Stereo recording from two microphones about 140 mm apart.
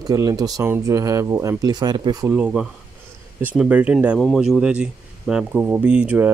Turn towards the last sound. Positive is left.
turn(degrees=-10)  # may be behind; listen again after turning